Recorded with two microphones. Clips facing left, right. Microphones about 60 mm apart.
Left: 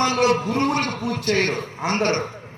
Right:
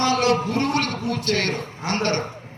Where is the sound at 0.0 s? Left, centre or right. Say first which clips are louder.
Left 1 dB; left.